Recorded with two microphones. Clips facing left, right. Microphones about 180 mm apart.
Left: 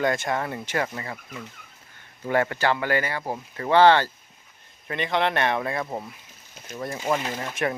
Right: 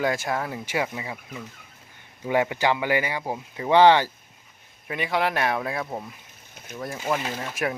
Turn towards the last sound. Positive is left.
turn(degrees=0)  # may be behind; listen again after turning